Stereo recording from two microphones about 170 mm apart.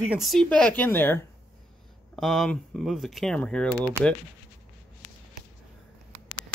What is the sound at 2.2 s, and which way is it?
Speech, centre (ahead or behind).